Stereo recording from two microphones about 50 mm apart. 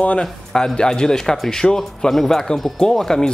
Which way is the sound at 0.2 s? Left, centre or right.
Centre.